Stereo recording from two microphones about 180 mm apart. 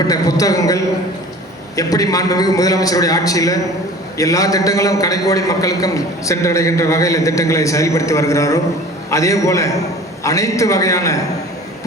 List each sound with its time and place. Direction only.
0.1 s a man's voice: 20° left (ahead or behind)